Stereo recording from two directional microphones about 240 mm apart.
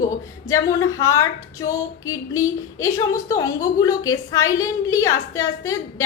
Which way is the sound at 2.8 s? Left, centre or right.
Centre.